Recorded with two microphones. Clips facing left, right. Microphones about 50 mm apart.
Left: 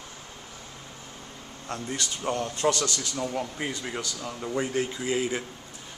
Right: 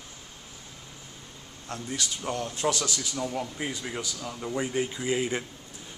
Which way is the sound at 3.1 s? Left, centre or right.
Centre.